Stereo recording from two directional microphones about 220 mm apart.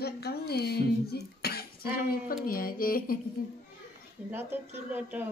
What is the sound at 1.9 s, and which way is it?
Music, 40° left (ahead or behind).